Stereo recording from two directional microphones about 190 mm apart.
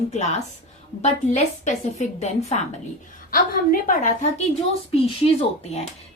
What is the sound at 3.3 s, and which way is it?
A woman's voice, 50° left (ahead or behind).